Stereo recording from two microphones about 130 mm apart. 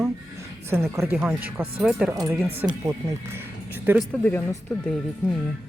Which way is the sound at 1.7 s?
10° right (ahead or behind).